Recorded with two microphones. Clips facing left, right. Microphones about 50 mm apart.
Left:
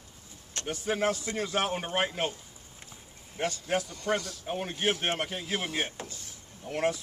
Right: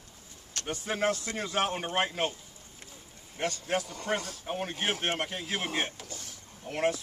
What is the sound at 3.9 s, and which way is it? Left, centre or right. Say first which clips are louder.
Speech: left 2 dB; right.